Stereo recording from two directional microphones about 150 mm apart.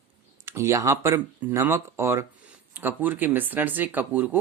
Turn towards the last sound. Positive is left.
turn(degrees=-10)  # may be behind; listen again after turning